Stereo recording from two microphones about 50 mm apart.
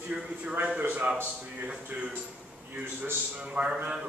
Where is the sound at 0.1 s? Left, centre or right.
Right.